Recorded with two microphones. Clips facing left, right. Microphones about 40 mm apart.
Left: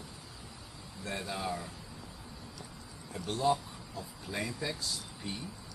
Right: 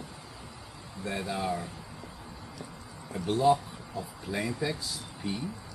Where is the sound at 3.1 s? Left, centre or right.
Centre.